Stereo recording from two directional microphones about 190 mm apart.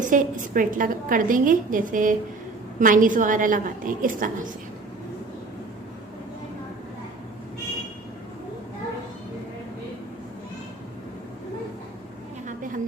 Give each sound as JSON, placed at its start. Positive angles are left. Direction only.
{"t": 0.0, "sound": "a woman's voice", "side_deg": -45}